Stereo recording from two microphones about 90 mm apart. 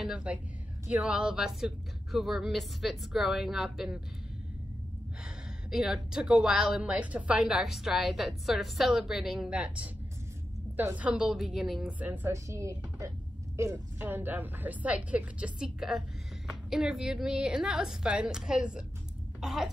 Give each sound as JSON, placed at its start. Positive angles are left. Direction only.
{"t": 0.0, "sound": "a woman's voice", "side_deg": -10}
{"t": 5.7, "sound": "a woman's voice", "side_deg": -5}
{"t": 12.0, "sound": "a woman's voice", "side_deg": -20}
{"t": 12.3, "sound": "a woman's voice", "side_deg": -35}